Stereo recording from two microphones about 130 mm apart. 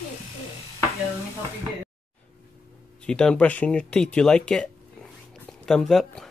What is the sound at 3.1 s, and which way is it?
Speech, 5° left (ahead or behind).